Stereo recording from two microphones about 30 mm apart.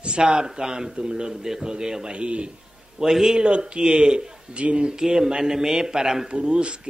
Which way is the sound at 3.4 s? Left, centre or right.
Right.